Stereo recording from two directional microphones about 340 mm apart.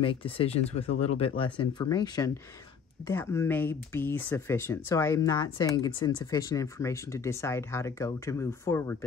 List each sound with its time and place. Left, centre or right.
0.0 s speech: centre